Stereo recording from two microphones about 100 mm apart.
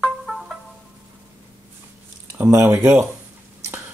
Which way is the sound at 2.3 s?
30° right (ahead or behind).